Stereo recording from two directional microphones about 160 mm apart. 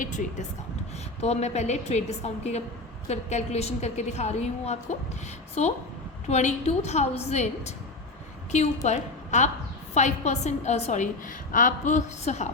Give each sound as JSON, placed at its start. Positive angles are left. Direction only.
{"t": 0.0, "sound": "a woman's voice", "side_deg": 50}